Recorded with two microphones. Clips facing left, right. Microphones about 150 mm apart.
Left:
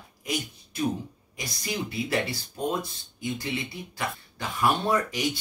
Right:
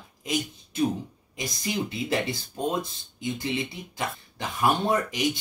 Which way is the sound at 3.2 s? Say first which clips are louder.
Right 2 dB; 20° right (ahead or behind).